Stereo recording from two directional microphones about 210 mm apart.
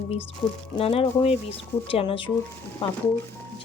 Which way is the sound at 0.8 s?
25° left (ahead or behind).